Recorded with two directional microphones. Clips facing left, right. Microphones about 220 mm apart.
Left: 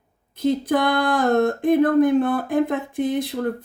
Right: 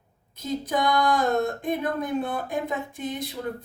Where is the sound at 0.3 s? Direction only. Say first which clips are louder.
Left 7 dB; 55° left (ahead or behind).